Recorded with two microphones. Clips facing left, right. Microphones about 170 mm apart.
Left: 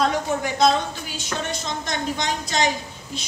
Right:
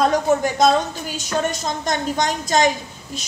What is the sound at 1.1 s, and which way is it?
Speech, 45° right (ahead or behind).